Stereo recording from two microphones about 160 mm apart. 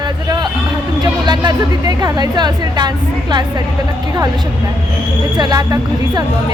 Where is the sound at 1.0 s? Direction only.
25° right (ahead or behind).